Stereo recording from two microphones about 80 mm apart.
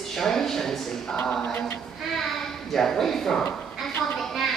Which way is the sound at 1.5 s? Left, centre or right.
Centre.